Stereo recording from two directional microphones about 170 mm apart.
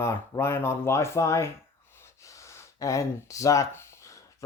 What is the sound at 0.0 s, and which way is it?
Speech, 15° left (ahead or behind).